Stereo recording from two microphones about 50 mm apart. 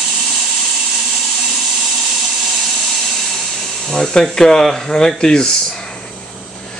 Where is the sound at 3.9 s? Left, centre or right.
Centre.